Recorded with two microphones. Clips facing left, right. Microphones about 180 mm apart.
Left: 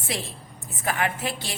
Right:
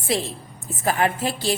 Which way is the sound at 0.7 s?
35° right (ahead or behind).